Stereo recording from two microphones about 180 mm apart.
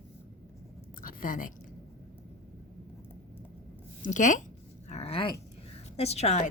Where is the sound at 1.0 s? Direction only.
50° left (ahead or behind).